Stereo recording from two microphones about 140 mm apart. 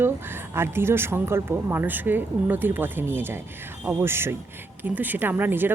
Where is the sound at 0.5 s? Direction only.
15° right (ahead or behind).